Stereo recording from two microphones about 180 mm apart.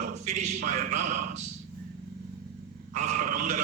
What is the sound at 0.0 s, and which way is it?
A man's voice, 40° right (ahead or behind).